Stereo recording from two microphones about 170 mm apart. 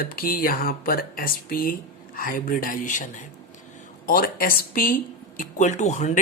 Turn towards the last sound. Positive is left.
turn(degrees=45)  # may be behind; listen again after turning